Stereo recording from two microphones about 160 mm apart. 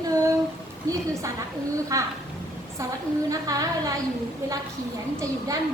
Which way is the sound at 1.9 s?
20° right (ahead or behind).